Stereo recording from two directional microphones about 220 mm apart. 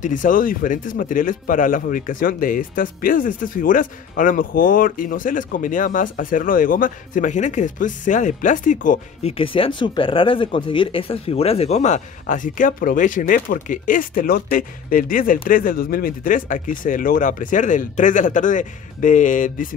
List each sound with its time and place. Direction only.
0.0 s speech: 35° left (ahead or behind)
9.4 s speech: 25° left (ahead or behind)